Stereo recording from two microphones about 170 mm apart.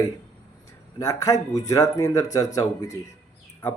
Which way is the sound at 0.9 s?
20° left (ahead or behind).